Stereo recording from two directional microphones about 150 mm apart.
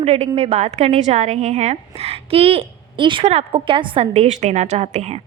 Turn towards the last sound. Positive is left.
turn(degrees=-50)  # may be behind; listen again after turning